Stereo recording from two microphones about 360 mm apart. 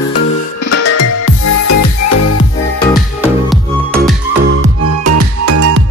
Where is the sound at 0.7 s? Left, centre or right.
Left.